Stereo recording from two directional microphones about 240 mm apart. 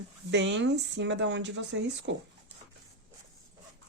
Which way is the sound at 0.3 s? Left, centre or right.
Right.